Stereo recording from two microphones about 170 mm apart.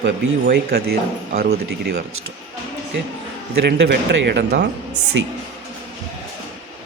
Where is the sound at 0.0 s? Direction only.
75° right (ahead or behind).